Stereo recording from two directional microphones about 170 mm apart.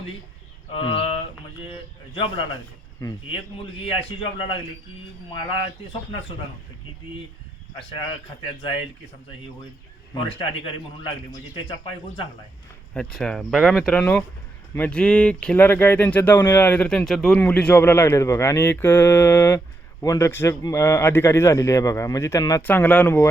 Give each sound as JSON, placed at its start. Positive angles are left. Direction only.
{"t": 0.7, "sound": "a man's voice", "side_deg": 30}
{"t": 3.0, "sound": "a man's voice", "side_deg": 20}
{"t": 3.8, "sound": "a man's voice", "side_deg": 30}
{"t": 5.9, "sound": "a man's voice", "side_deg": 30}
{"t": 10.2, "sound": "a man's voice", "side_deg": 30}
{"t": 12.9, "sound": "speech", "side_deg": 5}